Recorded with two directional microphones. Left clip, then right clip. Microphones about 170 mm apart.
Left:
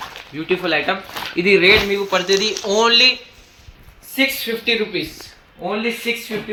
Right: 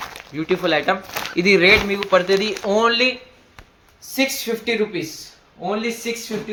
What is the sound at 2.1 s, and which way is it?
Speech, 50° right (ahead or behind).